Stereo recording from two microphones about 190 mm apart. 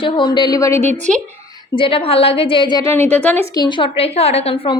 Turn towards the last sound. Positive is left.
turn(degrees=30)  # may be behind; listen again after turning